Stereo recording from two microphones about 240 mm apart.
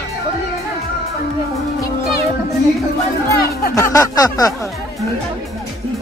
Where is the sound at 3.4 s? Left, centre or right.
Left.